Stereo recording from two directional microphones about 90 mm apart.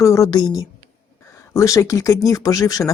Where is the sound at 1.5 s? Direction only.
35° left (ahead or behind).